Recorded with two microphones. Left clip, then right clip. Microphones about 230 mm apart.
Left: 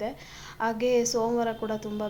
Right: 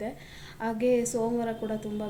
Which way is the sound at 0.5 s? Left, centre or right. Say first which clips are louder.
Left 2 dB; left.